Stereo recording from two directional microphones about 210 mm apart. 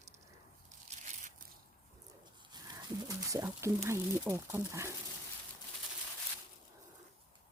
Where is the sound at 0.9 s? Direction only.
30° right (ahead or behind).